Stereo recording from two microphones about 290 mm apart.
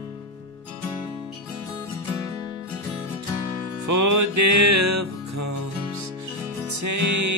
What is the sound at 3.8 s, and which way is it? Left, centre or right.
Music, right.